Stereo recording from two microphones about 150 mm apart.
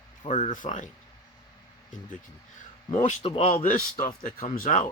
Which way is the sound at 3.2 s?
40° left (ahead or behind).